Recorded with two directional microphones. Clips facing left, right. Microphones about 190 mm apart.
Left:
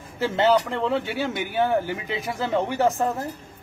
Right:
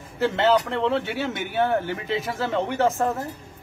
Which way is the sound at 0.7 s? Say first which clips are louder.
Right 1 dB; 5° left (ahead or behind).